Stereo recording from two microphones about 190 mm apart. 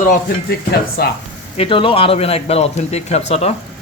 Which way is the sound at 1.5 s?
30° left (ahead or behind).